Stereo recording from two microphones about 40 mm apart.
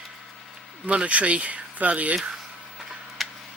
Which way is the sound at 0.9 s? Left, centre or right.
Right.